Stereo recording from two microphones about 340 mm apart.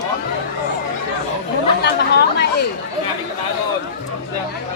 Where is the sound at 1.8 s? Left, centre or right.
Left.